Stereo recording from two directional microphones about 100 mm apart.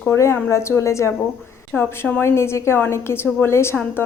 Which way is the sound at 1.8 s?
10° left (ahead or behind).